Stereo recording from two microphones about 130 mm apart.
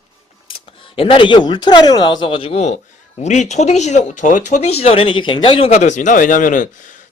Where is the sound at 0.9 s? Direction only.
45° left (ahead or behind).